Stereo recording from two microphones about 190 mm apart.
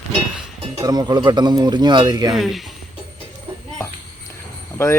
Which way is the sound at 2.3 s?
Centre (ahead or behind).